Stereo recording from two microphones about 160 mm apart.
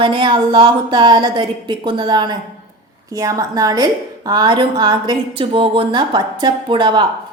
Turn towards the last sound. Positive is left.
turn(degrees=-30)  # may be behind; listen again after turning